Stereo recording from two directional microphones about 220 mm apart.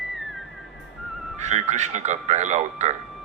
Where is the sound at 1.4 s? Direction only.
30° right (ahead or behind).